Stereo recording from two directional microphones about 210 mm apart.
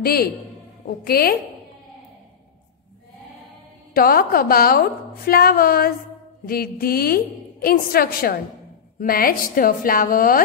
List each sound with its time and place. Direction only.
0.0 s a woman's voice: 45° left (ahead or behind)
3.9 s a woman's voice: 45° left (ahead or behind)